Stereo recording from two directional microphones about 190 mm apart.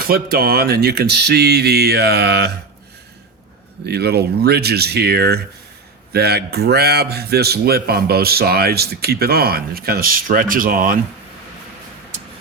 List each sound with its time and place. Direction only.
0.0 s speech: 50° right (ahead or behind)
3.8 s speech: 60° right (ahead or behind)